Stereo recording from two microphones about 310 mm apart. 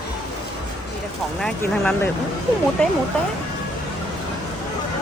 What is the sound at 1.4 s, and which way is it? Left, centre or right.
Speech, centre.